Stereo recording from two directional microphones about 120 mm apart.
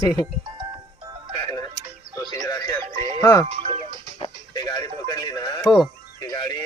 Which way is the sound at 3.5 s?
60° right (ahead or behind).